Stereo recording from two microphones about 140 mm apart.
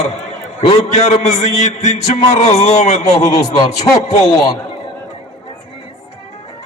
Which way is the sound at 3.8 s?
50° left (ahead or behind).